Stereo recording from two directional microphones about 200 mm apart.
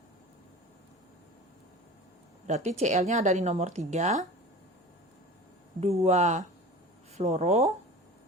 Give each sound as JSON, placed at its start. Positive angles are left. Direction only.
{"t": 2.5, "sound": "a woman's voice", "side_deg": -35}
{"t": 5.8, "sound": "a woman's voice", "side_deg": -30}